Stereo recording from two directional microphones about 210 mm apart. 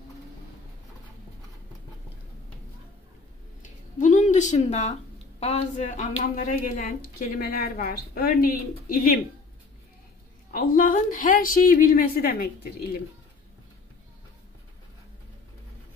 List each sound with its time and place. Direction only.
4.0 s a woman's voice: 35° left (ahead or behind)
10.5 s a woman's voice: 40° left (ahead or behind)